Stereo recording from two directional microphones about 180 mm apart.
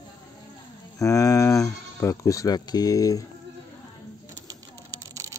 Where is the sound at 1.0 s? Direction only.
15° left (ahead or behind).